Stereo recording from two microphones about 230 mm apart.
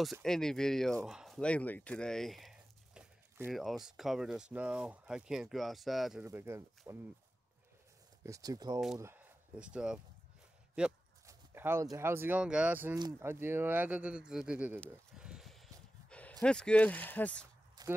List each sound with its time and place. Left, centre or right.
0.0 s speech: centre
6.2 s speech: centre
8.2 s speech: centre
14.8 s a sound: centre
16.1 s speech: centre
17.8 s a sound: centre